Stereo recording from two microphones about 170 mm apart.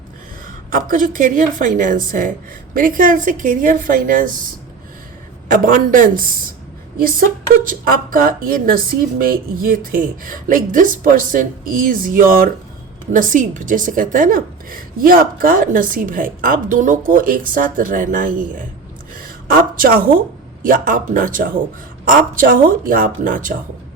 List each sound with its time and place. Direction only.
0.4 s a woman's voice: 55° right (ahead or behind)
5.5 s a woman's voice: 50° right (ahead or behind)
19.1 s a sound: 55° right (ahead or behind)
20.6 s a woman's voice: 55° right (ahead or behind)